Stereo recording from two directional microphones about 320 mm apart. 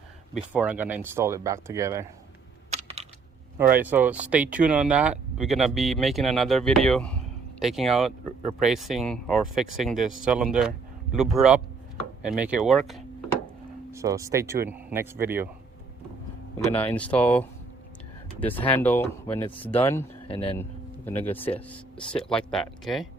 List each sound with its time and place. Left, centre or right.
0.3 s speech: centre
2.6 s computer keyboard: centre
3.7 s speech: centre
16.7 s speech: centre
20.6 s a sound: centre
21.5 s speech: centre